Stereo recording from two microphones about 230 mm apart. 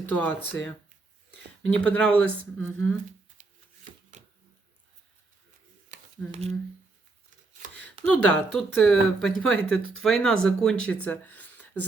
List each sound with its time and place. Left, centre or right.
0.0 s speech: centre
1.6 s speech: centre
3.4 s shuffling cards: right
4.1 s a sound: right
5.9 s a sound: right
8.0 s speech: centre